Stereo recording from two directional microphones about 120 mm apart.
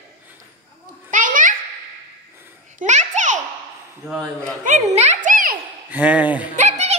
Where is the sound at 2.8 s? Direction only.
85° right.